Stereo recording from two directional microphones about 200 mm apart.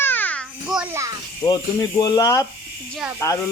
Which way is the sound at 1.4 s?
25° left (ahead or behind).